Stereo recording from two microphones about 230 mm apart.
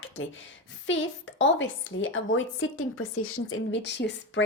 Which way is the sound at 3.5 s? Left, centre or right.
Left.